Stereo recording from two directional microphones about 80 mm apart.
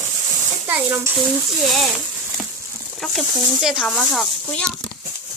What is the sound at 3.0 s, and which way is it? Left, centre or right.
Speech, centre.